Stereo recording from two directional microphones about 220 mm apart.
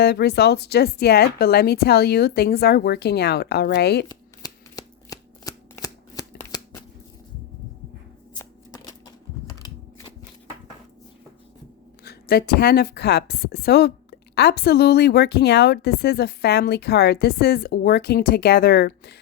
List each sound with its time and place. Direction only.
0.0 s a woman's voice: 45° left (ahead or behind)
4.1 s shuffling cards: 15° left (ahead or behind)
8.4 s shuffling cards: 15° left (ahead or behind)
12.0 s a woman's voice: 45° left (ahead or behind)